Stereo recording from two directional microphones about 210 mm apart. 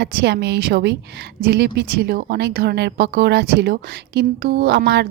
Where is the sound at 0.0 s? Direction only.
55° right (ahead or behind).